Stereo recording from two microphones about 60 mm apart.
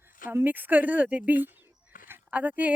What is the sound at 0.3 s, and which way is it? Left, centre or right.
Speech, right.